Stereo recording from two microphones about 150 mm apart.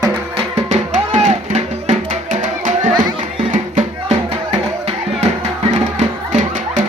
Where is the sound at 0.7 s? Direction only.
50° right (ahead or behind).